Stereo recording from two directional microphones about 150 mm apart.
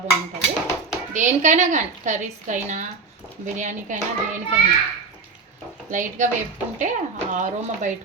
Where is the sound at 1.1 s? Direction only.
55° right (ahead or behind).